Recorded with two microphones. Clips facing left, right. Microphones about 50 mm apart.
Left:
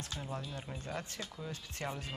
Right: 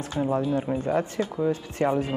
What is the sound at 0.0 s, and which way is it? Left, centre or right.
Speech, right.